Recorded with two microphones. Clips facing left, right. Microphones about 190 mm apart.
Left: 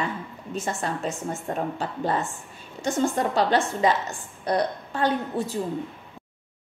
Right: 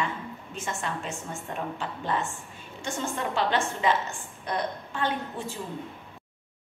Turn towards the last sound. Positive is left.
turn(degrees=40)  # may be behind; listen again after turning